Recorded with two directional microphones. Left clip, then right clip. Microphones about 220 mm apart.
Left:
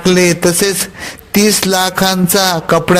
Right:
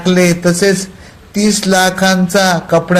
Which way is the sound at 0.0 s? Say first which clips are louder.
Left 1 dB; 40° left (ahead or behind).